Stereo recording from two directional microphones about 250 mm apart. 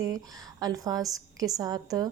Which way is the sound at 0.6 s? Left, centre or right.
Centre.